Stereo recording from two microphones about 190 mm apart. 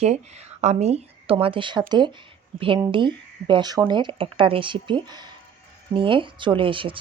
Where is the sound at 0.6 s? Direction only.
35° right (ahead or behind).